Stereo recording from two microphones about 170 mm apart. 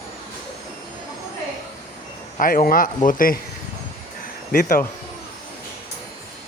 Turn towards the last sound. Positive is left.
turn(degrees=55)  # may be behind; listen again after turning